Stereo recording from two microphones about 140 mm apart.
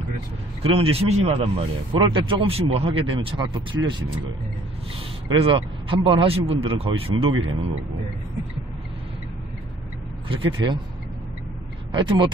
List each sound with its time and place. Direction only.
0.6 s speech: 45° right (ahead or behind)
5.4 s speech: 40° right (ahead or behind)
10.2 s speech: 40° right (ahead or behind)
11.9 s speech: 35° right (ahead or behind)